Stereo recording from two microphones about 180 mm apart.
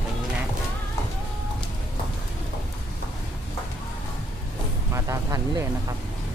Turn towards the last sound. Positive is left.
turn(degrees=-20)  # may be behind; listen again after turning